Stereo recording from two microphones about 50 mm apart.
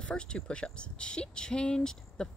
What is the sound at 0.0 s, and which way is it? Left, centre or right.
Speech, centre.